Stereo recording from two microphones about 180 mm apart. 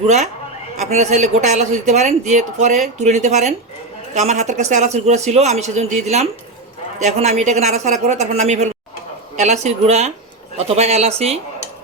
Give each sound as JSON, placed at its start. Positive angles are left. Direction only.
{"t": 0.8, "sound": "speech", "side_deg": -40}